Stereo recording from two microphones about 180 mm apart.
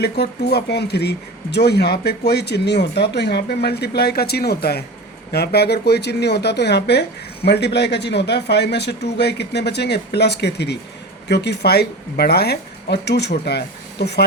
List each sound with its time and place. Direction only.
0.0 s speech: 65° left (ahead or behind)